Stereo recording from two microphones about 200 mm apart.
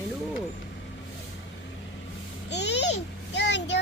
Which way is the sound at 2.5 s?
60° left (ahead or behind).